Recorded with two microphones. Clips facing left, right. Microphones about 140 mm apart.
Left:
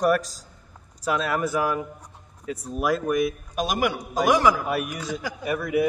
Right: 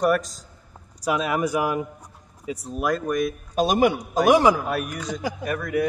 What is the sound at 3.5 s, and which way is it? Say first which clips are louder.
A man's voice: right 7 dB; 25° right (ahead or behind).